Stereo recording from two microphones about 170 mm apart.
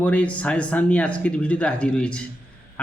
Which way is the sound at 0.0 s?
5° left (ahead or behind).